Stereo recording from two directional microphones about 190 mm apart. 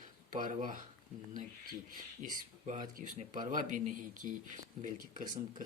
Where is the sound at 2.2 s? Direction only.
40° right (ahead or behind).